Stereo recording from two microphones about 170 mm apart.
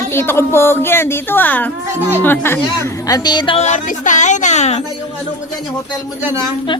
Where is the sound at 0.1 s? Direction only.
15° left (ahead or behind).